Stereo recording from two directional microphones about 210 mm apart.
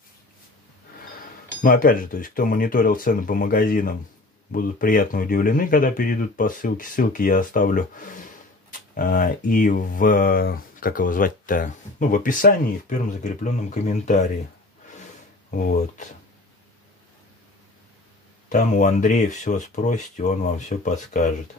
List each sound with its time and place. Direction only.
1.6 s speech: 40° left (ahead or behind)
15.5 s speech: 40° left (ahead or behind)
18.5 s speech: 35° left (ahead or behind)